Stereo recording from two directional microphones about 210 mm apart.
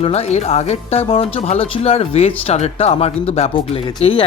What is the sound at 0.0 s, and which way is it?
Speech, 30° left (ahead or behind).